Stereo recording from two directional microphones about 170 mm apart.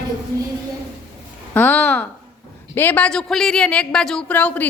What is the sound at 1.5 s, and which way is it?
Speech, 10° left (ahead or behind).